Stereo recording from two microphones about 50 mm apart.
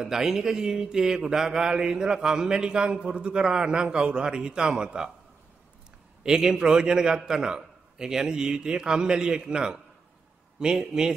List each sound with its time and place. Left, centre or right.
0.0 s speech: centre
6.2 s speech: centre